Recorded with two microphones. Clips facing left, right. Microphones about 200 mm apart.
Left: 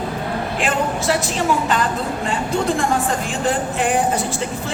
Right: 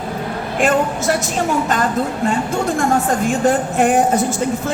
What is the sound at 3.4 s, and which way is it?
Music, 50° right (ahead or behind).